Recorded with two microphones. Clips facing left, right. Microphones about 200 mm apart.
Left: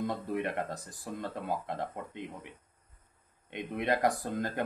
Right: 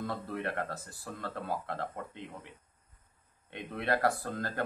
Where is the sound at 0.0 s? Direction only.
15° left (ahead or behind).